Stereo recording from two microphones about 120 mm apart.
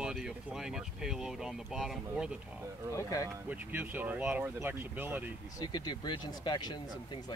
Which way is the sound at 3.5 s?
15° right (ahead or behind).